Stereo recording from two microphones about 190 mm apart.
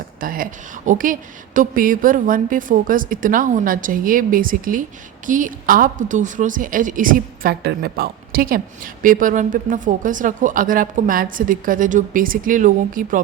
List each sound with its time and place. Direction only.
0.2 s a woman's voice: 45° right (ahead or behind)